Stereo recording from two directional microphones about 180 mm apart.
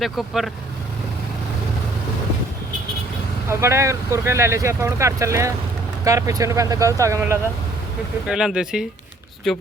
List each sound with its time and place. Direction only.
0.0 s speech: centre (ahead or behind)
3.5 s speech: 15° right (ahead or behind)
8.3 s speech: centre (ahead or behind)